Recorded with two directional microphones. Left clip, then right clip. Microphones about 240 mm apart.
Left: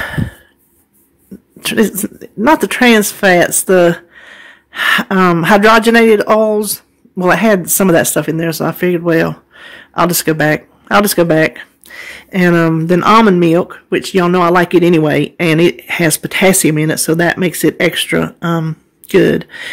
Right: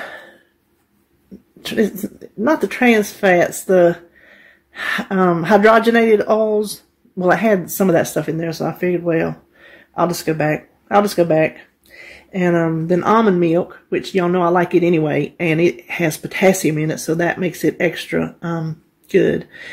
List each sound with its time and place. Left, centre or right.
1.6 s speech: left